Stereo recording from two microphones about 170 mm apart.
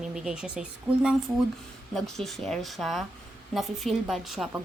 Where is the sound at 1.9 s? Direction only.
Centre (ahead or behind).